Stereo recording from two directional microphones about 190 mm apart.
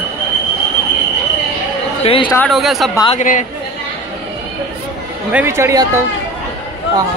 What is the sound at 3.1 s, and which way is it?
Speech, 40° left (ahead or behind).